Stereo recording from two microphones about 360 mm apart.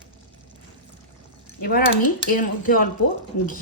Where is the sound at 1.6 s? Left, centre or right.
Left.